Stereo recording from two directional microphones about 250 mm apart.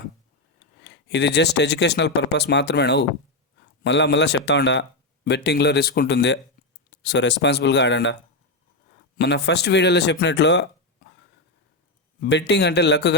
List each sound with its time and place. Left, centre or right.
0.9 s speech: left
9.1 s speech: left
12.2 s speech: left